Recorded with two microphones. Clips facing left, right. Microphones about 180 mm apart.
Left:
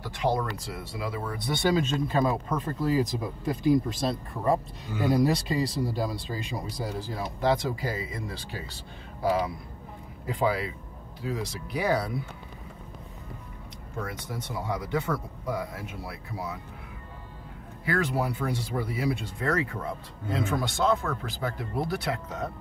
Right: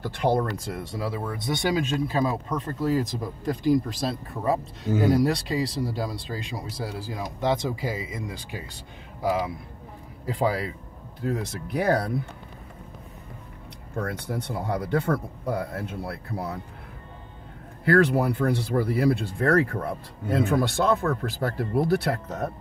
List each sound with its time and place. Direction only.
0.2 s speech: 55° right (ahead or behind)
0.9 s speech: 35° right (ahead or behind)
1.4 s speech: 15° right (ahead or behind)
2.0 s speech: centre (ahead or behind); by 8.5 s 15° right (ahead or behind)
10.2 s speech: 40° right (ahead or behind)
11.1 s speech: 55° right (ahead or behind)
14.0 s speech: 60° right (ahead or behind)
17.8 s speech: 60° right (ahead or behind)